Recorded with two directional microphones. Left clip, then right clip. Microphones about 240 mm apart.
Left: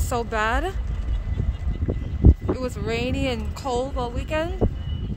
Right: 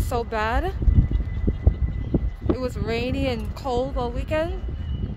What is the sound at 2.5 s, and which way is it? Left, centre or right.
Speech, centre.